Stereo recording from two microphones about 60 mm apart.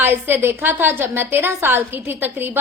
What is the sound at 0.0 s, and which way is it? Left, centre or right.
A woman's voice, right.